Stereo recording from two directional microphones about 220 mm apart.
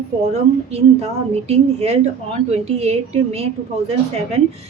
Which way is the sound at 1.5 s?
30° right (ahead or behind).